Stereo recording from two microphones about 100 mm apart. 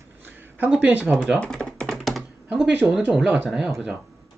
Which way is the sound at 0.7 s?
15° right (ahead or behind).